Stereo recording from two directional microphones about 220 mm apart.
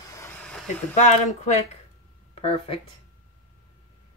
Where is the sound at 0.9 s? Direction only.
35° left (ahead or behind).